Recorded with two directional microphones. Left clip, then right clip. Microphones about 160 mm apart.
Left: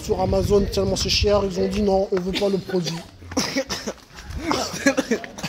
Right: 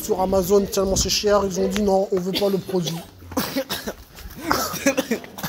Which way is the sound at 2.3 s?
15° right (ahead or behind).